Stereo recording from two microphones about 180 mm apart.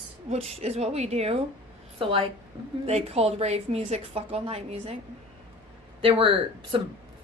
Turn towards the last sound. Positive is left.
turn(degrees=-30)  # may be behind; listen again after turning